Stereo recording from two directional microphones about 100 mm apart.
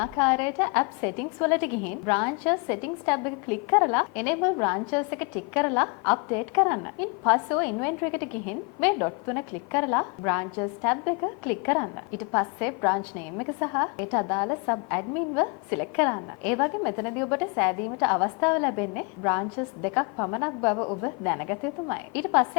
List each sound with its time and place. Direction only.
0.2 s a woman's voice: 15° left (ahead or behind)